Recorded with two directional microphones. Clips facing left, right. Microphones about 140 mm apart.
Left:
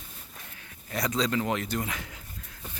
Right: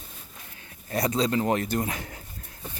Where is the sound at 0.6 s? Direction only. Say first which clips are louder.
Right 5 dB; 30° right (ahead or behind).